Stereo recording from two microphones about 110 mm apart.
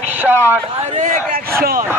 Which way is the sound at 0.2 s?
15° right (ahead or behind).